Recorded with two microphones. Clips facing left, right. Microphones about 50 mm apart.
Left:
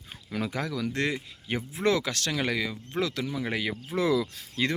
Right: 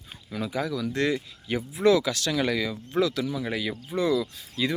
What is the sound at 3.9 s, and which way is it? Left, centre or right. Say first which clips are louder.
Speech: right 1 dB; left.